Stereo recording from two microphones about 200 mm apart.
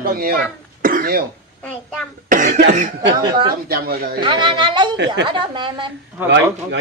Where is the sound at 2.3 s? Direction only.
40° right (ahead or behind).